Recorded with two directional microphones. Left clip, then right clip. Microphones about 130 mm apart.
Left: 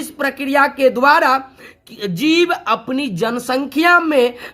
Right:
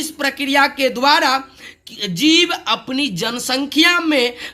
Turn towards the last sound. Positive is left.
turn(degrees=60)  # may be behind; listen again after turning